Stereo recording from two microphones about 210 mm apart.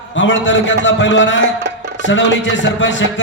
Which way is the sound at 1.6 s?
55° right (ahead or behind).